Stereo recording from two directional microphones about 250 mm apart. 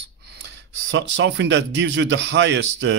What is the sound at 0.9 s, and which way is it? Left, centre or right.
Speech, right.